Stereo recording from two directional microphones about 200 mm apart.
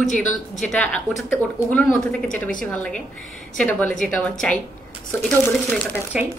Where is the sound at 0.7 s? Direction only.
5° left (ahead or behind).